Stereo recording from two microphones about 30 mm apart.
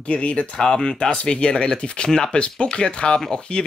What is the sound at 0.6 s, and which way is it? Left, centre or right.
Speech, left.